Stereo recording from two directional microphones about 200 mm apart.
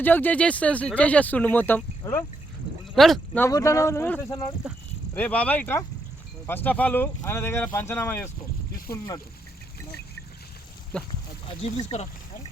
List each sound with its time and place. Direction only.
0.0 s speech: 10° left (ahead or behind)
3.4 s speech: 15° left (ahead or behind)
10.9 s speech: 5° left (ahead or behind)
11.4 s speech: 30° left (ahead or behind)